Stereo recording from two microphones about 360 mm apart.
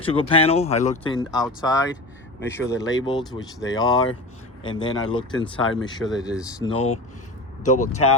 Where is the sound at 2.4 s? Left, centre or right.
Centre.